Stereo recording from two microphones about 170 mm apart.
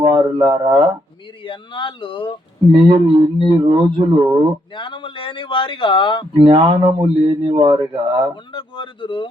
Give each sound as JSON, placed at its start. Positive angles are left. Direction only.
{"t": 0.0, "sound": "speech", "side_deg": -25}
{"t": 1.5, "sound": "a man's voice", "side_deg": 30}
{"t": 2.7, "sound": "speech", "side_deg": -30}
{"t": 4.7, "sound": "a man's voice", "side_deg": 30}
{"t": 6.3, "sound": "speech", "side_deg": -30}
{"t": 8.5, "sound": "a man's voice", "side_deg": 30}